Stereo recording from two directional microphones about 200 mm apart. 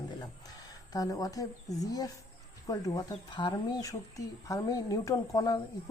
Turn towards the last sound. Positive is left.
turn(degrees=15)  # may be behind; listen again after turning